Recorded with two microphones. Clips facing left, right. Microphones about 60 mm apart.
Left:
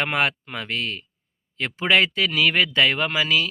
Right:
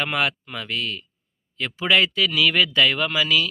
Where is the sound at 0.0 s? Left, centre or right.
Left.